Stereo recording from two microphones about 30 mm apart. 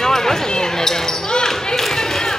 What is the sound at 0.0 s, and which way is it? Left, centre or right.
Basketball bounce, centre.